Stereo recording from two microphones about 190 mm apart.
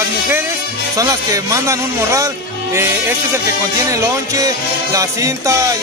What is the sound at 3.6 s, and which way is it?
Speech, 15° right (ahead or behind).